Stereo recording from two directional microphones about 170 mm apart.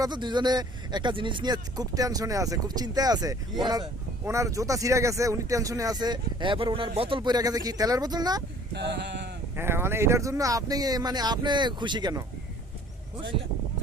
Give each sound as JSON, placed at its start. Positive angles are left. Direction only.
{"t": 0.0, "sound": "speech", "side_deg": -25}
{"t": 8.7, "sound": "mantra", "side_deg": -90}
{"t": 9.6, "sound": "speech", "side_deg": -15}